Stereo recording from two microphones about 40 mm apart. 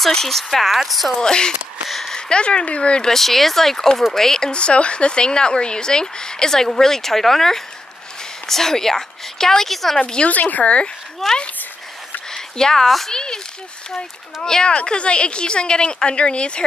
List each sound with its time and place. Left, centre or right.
0.1 s a woman's voice: centre
1.2 s speech: centre
1.9 s speech: centre
2.1 s speech: left
3.1 s a woman's voice: centre
9.9 s speech: left
10.2 s speech: left
11.2 s speech: centre
12.3 s a sound: centre
13.1 s a woman's voice: centre